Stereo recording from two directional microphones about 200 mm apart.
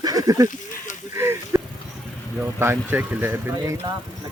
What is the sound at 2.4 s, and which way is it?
Speech, 10° right (ahead or behind).